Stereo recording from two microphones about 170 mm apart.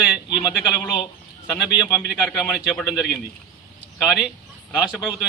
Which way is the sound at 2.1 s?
5° right (ahead or behind).